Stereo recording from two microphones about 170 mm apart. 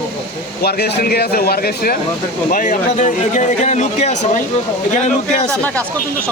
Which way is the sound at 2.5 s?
50° left (ahead or behind).